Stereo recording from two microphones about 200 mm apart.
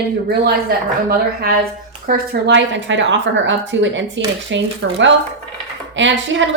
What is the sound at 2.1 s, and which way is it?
A woman's voice, 60° right (ahead or behind).